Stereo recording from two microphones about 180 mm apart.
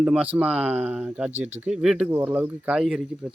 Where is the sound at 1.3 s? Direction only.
40° right (ahead or behind).